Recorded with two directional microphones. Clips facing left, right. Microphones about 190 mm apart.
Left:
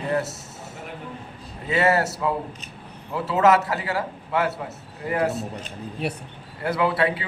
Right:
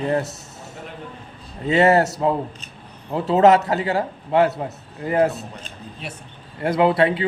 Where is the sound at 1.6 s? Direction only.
25° right (ahead or behind).